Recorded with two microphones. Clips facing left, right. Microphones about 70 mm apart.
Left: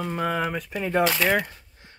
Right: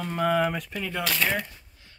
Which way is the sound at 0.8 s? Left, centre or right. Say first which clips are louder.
Left 7 dB; left.